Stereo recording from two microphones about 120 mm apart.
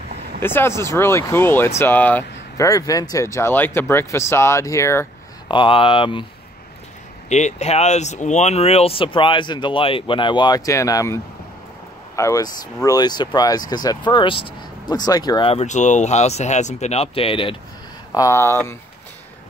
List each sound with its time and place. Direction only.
0.4 s speech: 20° left (ahead or behind)
2.5 s speech: 30° left (ahead or behind)
5.5 s speech: 45° left (ahead or behind)
7.2 s speech: 75° left (ahead or behind); by 11.1 s 25° left (ahead or behind)
12.2 s speech: 25° left (ahead or behind)
15.6 s speech: 90° left; by 17.6 s 50° left (ahead or behind)
18.1 s speech: 25° left (ahead or behind)